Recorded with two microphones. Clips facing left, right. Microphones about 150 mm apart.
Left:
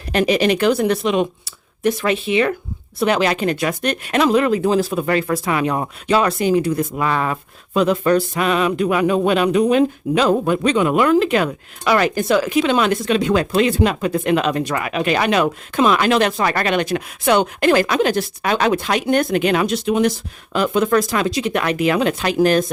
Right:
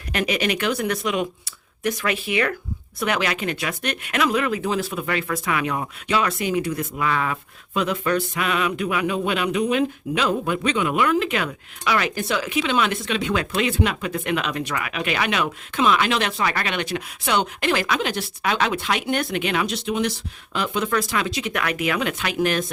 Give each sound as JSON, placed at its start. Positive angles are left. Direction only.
{"t": 0.1, "sound": "speech", "side_deg": 30}